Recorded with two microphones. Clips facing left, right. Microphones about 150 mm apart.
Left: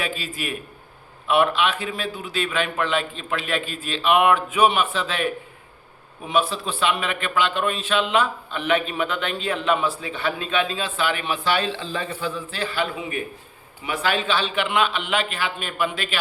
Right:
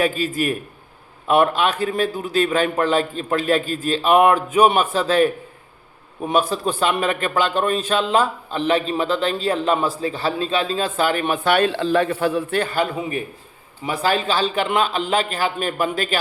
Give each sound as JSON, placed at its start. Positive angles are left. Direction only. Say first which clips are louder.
{"t": 0.0, "sound": "a man's voice", "louder": "right 9 dB", "side_deg": -45}